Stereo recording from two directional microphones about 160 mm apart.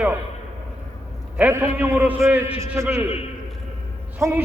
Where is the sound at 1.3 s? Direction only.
10° right (ahead or behind).